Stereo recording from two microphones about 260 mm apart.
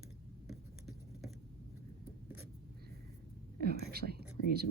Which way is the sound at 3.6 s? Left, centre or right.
Right.